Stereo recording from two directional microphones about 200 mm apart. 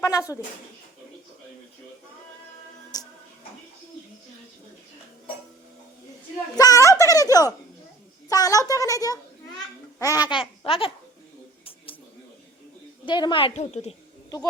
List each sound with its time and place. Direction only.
0.0 s speech: 15° left (ahead or behind)
2.9 s music: 20° left (ahead or behind)
6.6 s a woman's voice: 15° left (ahead or behind)
13.1 s a woman's voice: 25° left (ahead or behind)